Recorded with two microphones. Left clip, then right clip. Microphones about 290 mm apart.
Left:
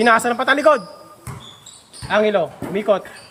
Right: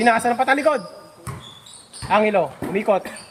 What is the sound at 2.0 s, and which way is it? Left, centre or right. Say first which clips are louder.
Speech: left 1 dB; centre.